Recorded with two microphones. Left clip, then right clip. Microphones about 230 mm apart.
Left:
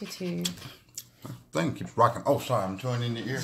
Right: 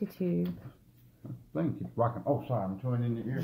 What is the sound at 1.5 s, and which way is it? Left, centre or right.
Speech, left.